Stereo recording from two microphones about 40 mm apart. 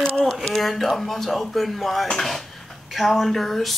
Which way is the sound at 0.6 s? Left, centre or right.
Centre.